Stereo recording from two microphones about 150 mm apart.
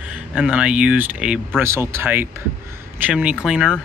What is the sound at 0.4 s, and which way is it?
Speech, 5° right (ahead or behind).